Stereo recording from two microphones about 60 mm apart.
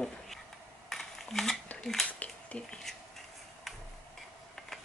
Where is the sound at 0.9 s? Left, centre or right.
Centre.